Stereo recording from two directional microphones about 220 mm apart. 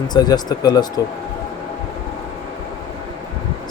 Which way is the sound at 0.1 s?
20° left (ahead or behind).